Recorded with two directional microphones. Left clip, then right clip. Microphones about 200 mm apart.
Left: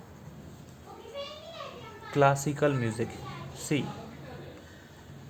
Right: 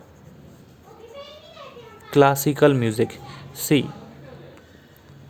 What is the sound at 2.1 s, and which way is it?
Speech, 50° right (ahead or behind).